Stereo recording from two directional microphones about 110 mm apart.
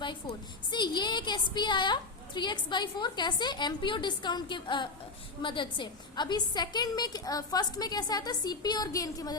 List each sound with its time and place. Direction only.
0.0 s a woman's voice: 45° left (ahead or behind)